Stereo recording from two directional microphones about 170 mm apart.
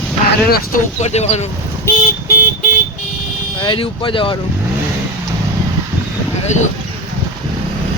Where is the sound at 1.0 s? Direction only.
40° left (ahead or behind).